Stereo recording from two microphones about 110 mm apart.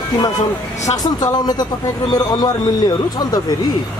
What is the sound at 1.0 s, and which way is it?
Speech, 35° left (ahead or behind).